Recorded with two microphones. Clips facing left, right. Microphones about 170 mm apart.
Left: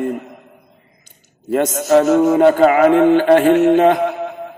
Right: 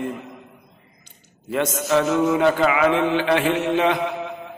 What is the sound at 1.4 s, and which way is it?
A man's voice, 45° left (ahead or behind).